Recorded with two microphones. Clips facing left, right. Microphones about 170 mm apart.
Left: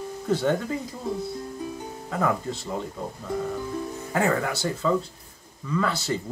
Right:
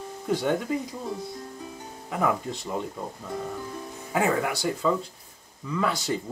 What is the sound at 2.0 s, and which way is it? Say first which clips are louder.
Speech: even; 15° right (ahead or behind).